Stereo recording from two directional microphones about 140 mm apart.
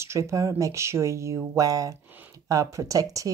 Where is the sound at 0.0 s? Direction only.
20° right (ahead or behind).